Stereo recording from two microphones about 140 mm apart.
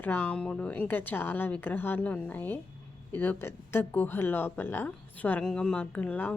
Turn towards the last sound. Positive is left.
turn(degrees=10)  # may be behind; listen again after turning